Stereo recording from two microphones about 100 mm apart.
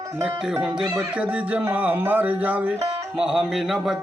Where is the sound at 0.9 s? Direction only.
15° right (ahead or behind).